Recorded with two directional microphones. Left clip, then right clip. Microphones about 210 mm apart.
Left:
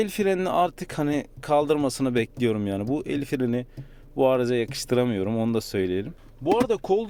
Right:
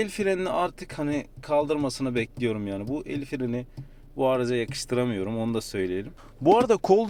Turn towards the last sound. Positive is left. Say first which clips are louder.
# right 3 dB
turn(degrees=-25)  # may be behind; listen again after turning